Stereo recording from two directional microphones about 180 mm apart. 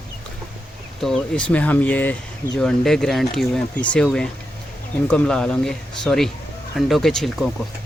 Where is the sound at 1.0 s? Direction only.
5° left (ahead or behind).